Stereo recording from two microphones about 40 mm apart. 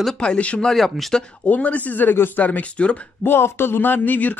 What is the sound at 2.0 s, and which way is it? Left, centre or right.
Speech, left.